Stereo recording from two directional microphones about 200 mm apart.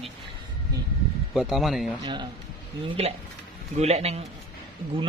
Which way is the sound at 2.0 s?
20° right (ahead or behind).